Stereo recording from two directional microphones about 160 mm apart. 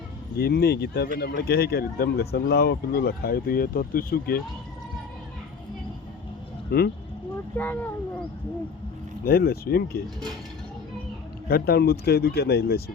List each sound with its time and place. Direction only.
0.3 s speech: 75° left (ahead or behind)
6.7 s speech: 75° left (ahead or behind)
7.5 s a child's voice: 10° left (ahead or behind)
9.2 s speech: 75° left (ahead or behind)
11.4 s speech: 75° left (ahead or behind)